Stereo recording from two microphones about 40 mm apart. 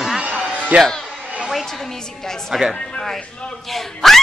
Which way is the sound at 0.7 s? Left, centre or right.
Right.